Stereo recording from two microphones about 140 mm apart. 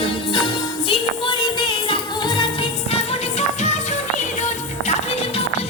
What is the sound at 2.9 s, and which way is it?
Music, 55° left (ahead or behind).